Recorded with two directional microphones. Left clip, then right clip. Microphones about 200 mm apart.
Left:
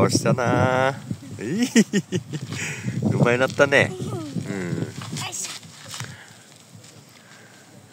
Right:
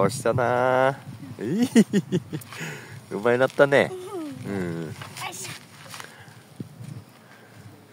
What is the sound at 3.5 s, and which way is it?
Livestock, 5° right (ahead or behind).